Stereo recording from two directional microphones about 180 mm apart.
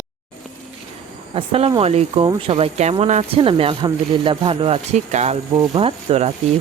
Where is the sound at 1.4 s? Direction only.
30° right (ahead or behind).